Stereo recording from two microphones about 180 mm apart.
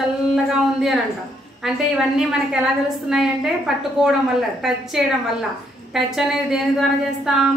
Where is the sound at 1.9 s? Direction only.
5° right (ahead or behind).